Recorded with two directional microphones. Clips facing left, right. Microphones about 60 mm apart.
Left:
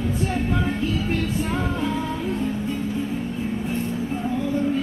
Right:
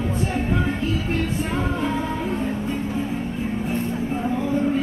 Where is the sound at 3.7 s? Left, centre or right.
Right.